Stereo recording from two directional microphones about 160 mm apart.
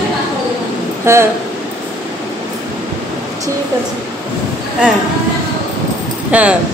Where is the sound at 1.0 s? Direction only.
15° right (ahead or behind).